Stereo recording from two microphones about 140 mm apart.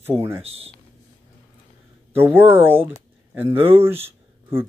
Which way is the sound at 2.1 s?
15° right (ahead or behind).